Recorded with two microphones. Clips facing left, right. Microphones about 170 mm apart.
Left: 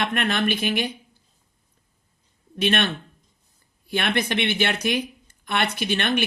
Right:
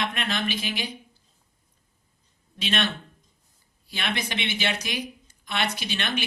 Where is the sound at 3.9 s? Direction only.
55° left (ahead or behind).